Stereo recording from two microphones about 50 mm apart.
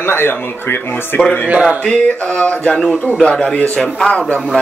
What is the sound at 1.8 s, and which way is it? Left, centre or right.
Speech, left.